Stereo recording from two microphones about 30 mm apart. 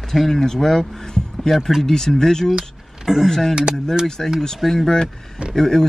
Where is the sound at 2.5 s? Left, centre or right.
Centre.